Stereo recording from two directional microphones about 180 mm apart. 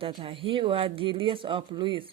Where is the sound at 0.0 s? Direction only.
30° right (ahead or behind).